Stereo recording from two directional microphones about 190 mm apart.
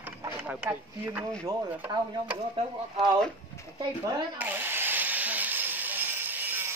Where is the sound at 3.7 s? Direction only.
20° right (ahead or behind).